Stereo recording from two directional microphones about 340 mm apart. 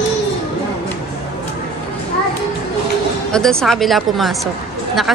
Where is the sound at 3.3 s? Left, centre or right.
Centre.